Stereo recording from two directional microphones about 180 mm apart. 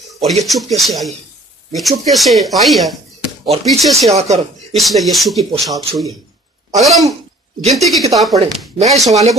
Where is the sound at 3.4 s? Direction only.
35° right (ahead or behind).